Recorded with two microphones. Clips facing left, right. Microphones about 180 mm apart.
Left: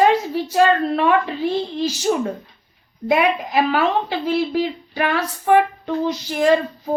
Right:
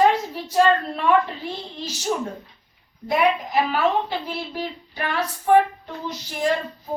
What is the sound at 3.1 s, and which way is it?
Female singing, 90° left.